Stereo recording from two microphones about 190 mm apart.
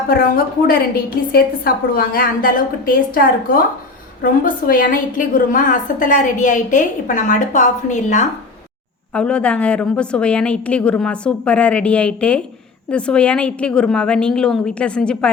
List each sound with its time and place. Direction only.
0.1 s a woman's voice: 50° left (ahead or behind)
9.1 s a woman's voice: 5° left (ahead or behind)